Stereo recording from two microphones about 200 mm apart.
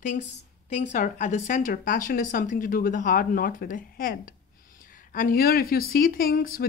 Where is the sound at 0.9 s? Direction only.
40° left (ahead or behind).